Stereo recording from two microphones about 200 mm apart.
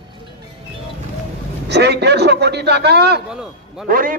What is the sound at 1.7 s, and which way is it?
A man's voice, 55° right (ahead or behind).